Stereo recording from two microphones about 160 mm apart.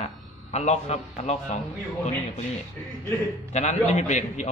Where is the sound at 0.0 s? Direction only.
45° left (ahead or behind).